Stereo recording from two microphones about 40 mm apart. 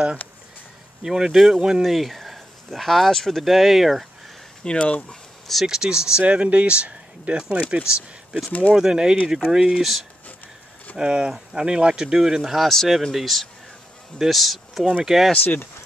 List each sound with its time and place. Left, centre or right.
1.0 s speech: centre
1.8 s speech: centre
4.6 s speech: left
5.7 s speech: centre
6.2 s speech: right
8.5 s speech: left
8.7 s speech: centre
9.8 s speech: centre
11.0 s speech: right; by 15.3 s centre
15.4 s speech: left